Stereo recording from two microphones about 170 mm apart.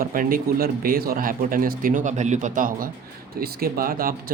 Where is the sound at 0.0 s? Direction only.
55° right (ahead or behind).